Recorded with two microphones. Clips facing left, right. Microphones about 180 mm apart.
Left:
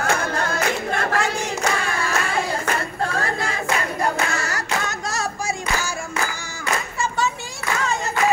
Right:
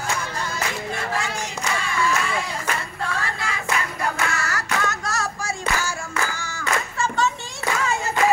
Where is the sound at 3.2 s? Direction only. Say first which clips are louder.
Left 4 dB; 40° left (ahead or behind).